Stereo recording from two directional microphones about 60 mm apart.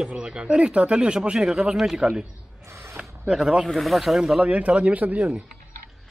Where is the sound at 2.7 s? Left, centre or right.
Right.